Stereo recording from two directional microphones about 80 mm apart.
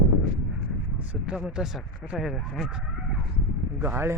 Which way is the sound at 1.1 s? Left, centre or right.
Centre.